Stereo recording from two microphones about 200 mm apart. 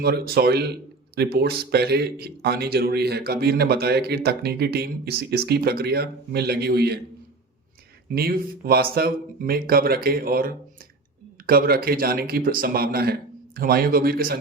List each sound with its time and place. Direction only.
0.0 s speech: 50° right (ahead or behind)
8.1 s speech: 50° right (ahead or behind)